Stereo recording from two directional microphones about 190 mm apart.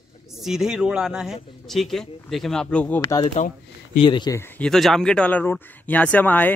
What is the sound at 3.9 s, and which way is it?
Speech, 25° left (ahead or behind).